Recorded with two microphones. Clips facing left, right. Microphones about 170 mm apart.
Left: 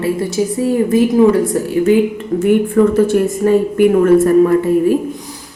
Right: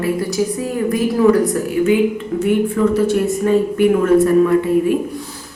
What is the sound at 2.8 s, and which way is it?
Speech, 55° left (ahead or behind).